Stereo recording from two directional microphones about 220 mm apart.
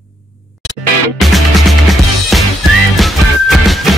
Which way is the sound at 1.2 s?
Centre (ahead or behind).